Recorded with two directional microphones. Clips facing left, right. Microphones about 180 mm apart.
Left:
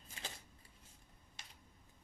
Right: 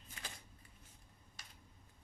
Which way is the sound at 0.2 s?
30° left (ahead or behind).